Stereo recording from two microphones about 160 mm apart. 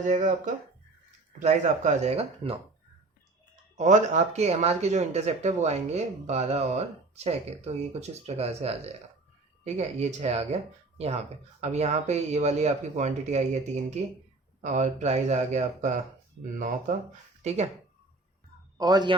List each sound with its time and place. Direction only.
0.1 s speech: 55° right (ahead or behind)
3.8 s speech: 50° right (ahead or behind)
18.8 s a man's voice: 25° right (ahead or behind)